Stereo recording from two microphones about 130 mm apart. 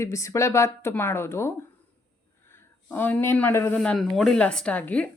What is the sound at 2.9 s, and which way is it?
Speech, 15° left (ahead or behind).